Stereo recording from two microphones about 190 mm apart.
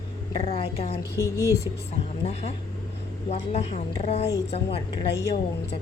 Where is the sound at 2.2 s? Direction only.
35° left (ahead or behind).